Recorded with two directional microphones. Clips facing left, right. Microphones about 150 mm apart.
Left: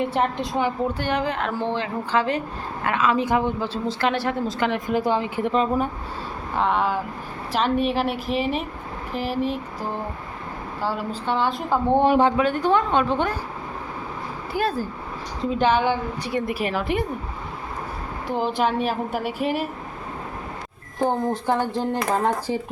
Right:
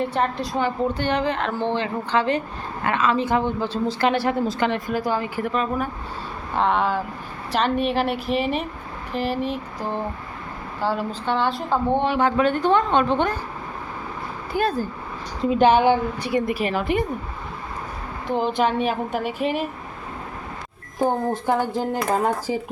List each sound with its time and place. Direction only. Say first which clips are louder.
0.1 s a woman's voice: even; 20° left (ahead or behind)
0.9 s speech: right 2 dB; 5° left (ahead or behind)
4.9 s a woman's voice: left 2 dB; 20° left (ahead or behind)
6.6 s speech: right 1 dB; 5° left (ahead or behind)
11.1 s a woman's voice: right 1 dB; 5° left (ahead or behind)
11.9 s speech: left 4 dB; 40° left (ahead or behind)
12.4 s a woman's voice: right 1 dB; 10° left (ahead or behind)
14.5 s speech: right 2 dB; 5° left (ahead or behind)
15.4 s speech: right 4 dB; 15° right (ahead or behind)
16.3 s speech: right 2 dB; centre (ahead or behind)
18.3 s speech: right 1 dB; 5° left (ahead or behind)
21.0 s speech: right 1 dB; 10° right (ahead or behind)